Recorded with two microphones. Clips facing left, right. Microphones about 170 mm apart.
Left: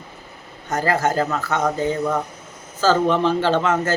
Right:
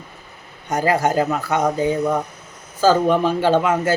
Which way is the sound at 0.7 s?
15° right (ahead or behind).